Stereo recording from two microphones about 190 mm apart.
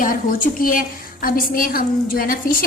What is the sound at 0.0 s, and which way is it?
A woman's voice, 45° left (ahead or behind).